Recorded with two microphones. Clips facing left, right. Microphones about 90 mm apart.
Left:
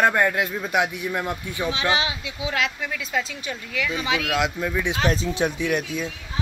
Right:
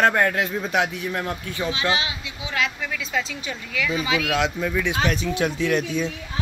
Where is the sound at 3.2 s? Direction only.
45° left (ahead or behind).